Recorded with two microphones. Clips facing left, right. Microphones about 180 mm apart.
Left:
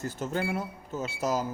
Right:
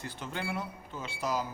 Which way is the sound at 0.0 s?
45° left (ahead or behind).